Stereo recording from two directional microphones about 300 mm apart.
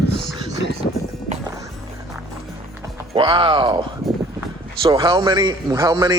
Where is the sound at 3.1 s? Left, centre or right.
Centre.